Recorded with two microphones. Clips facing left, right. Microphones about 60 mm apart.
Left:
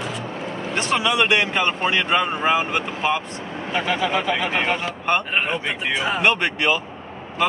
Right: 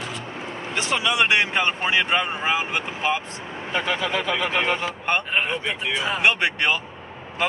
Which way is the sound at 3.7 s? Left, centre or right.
Centre.